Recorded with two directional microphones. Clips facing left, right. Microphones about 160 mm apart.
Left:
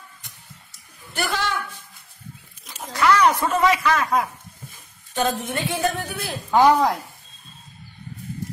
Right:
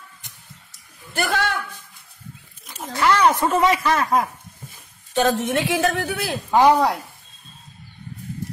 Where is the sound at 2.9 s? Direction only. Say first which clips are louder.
Even; 25° right (ahead or behind); by 4.3 s 45° right (ahead or behind).